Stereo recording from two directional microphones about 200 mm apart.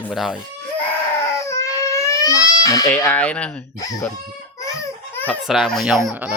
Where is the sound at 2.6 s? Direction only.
15° left (ahead or behind).